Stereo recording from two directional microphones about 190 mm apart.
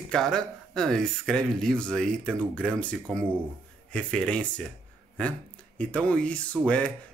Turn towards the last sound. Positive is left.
turn(degrees=5)  # may be behind; listen again after turning